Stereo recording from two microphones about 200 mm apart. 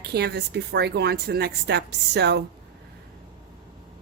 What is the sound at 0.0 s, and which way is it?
A woman's voice, 50° right (ahead or behind).